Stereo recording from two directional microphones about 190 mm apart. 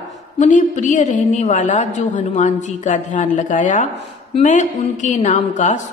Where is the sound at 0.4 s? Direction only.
40° left (ahead or behind).